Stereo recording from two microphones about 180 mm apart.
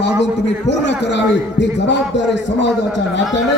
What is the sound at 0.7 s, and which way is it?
Speech, 80° left.